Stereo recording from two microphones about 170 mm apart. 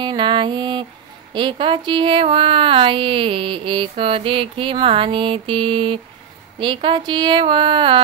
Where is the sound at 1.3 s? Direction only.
30° right (ahead or behind).